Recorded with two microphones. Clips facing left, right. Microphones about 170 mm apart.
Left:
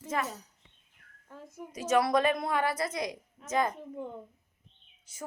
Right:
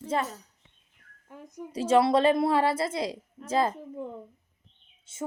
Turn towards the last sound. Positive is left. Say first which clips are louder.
# right 8 dB
turn(degrees=-25)  # may be behind; listen again after turning